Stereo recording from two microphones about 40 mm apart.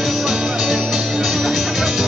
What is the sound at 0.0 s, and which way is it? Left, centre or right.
Music, centre.